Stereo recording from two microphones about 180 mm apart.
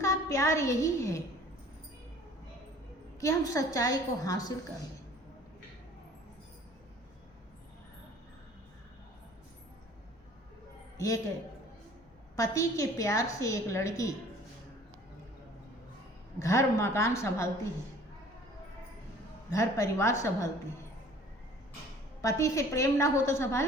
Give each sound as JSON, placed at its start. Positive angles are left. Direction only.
{"t": 0.0, "sound": "a woman's voice", "side_deg": 15}
{"t": 3.2, "sound": "a woman's voice", "side_deg": 15}
{"t": 10.9, "sound": "a man's voice", "side_deg": 15}
{"t": 12.4, "sound": "a woman's voice", "side_deg": 15}
{"t": 16.4, "sound": "a woman's voice", "side_deg": 15}
{"t": 19.5, "sound": "a woman's voice", "side_deg": 15}
{"t": 22.2, "sound": "a woman's voice", "side_deg": 15}